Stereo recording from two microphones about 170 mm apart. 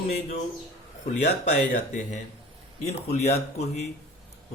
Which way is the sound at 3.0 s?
40° left (ahead or behind).